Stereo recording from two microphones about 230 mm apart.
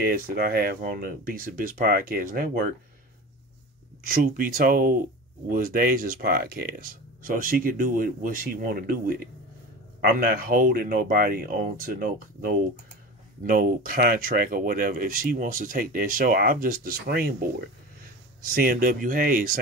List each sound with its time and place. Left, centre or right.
0.0 s speech: right
4.0 s speech: right